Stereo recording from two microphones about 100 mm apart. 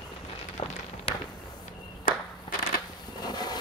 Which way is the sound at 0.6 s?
60° left (ahead or behind).